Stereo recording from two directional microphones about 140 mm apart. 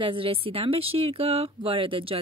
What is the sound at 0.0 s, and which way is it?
Speech, 40° right (ahead or behind).